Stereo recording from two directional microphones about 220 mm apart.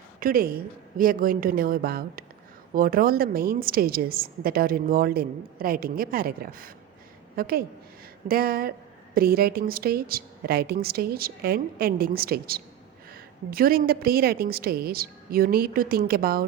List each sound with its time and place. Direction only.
0.2 s a woman's voice: 40° right (ahead or behind)